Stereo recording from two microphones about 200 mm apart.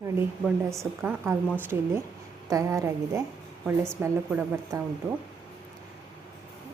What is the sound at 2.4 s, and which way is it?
A woman's voice, 15° right (ahead or behind).